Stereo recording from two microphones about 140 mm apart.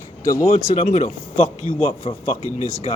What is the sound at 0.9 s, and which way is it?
Speech, 60° left (ahead or behind).